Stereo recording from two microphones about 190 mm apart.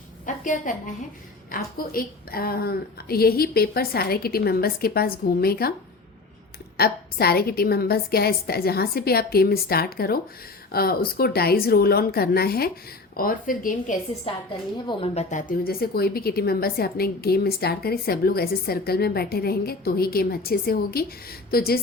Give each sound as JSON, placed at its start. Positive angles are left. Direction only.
{"t": 0.3, "sound": "a sound", "side_deg": 45}
{"t": 1.5, "sound": "a woman's voice", "side_deg": 50}
{"t": 6.7, "sound": "a woman's voice", "side_deg": 55}
{"t": 14.8, "sound": "a woman's voice", "side_deg": 30}